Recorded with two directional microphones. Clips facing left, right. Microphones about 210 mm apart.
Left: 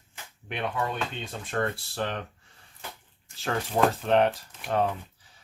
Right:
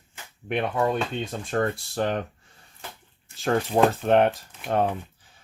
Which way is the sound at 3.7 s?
45° right (ahead or behind).